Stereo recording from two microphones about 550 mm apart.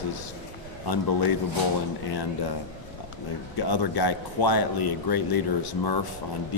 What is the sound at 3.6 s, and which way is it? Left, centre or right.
Speech, left.